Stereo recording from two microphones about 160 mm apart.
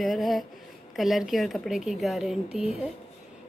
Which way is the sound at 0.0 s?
Centre (ahead or behind).